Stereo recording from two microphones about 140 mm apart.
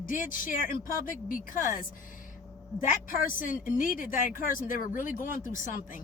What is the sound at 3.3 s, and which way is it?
Speech, 70° left (ahead or behind).